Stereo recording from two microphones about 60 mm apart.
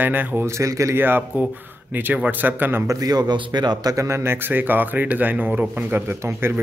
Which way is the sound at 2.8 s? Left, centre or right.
Right.